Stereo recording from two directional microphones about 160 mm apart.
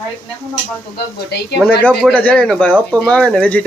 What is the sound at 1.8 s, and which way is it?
Speech, 5° left (ahead or behind).